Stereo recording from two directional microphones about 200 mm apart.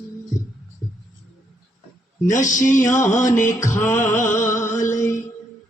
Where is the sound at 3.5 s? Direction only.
15° left (ahead or behind).